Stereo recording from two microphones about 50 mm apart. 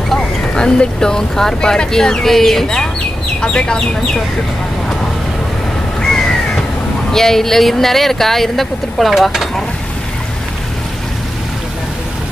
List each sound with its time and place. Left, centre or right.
0.1 s speech: centre
6.0 s crow: centre
7.1 s speech: centre